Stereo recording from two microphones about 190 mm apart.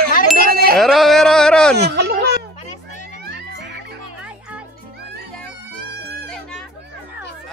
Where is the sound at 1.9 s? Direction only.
60° right (ahead or behind).